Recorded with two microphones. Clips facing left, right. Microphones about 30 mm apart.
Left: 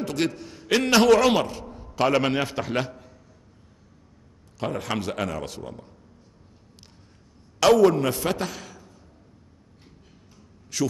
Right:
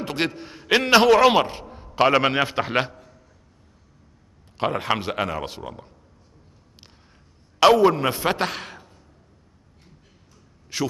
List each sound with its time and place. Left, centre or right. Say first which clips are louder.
0.0 s a man's voice: even; right
2.9 s a sound: left 2 dB; centre
4.6 s speech: right 5 dB; right
7.6 s speech: right 2 dB; right
8.4 s a man's voice: right 5 dB; right
10.7 s speech: even; right